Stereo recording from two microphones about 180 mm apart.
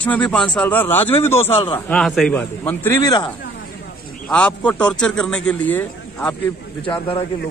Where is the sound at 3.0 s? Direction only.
20° left (ahead or behind).